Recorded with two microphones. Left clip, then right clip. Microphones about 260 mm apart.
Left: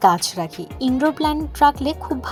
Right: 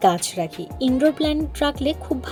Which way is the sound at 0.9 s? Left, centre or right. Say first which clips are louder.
Right 1 dB; centre.